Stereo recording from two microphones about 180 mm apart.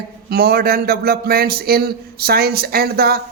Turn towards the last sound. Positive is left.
turn(degrees=-60)  # may be behind; listen again after turning